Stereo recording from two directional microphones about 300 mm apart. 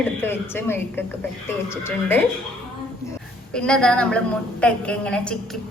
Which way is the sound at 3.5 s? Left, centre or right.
Centre.